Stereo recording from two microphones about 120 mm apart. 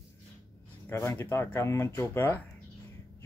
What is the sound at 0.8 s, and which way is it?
Speech, 20° left (ahead or behind).